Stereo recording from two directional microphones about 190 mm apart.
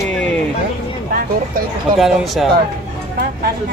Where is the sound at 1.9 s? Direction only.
Centre (ahead or behind).